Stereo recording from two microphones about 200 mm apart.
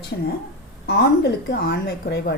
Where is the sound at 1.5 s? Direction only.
55° left (ahead or behind).